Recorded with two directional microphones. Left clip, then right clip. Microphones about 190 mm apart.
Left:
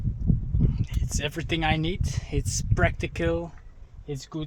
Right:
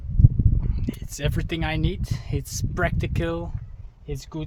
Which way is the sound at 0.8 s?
15° left (ahead or behind).